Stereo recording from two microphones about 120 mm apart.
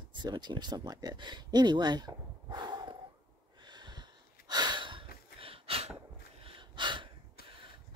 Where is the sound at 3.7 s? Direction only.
35° right (ahead or behind); by 5.9 s 55° right (ahead or behind).